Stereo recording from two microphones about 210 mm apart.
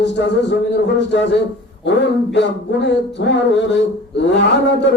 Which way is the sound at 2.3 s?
55° left (ahead or behind).